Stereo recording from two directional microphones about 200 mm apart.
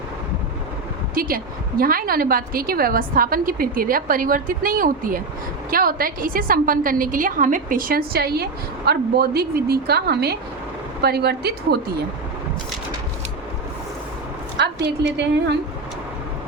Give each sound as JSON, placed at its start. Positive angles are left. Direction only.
{"t": 1.1, "sound": "a woman's voice", "side_deg": -45}
{"t": 14.8, "sound": "a woman's voice", "side_deg": -60}